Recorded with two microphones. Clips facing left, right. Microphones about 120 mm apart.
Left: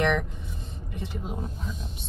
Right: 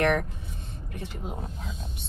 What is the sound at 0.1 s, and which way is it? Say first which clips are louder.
Vehicle: right 1 dB; 60° right (ahead or behind).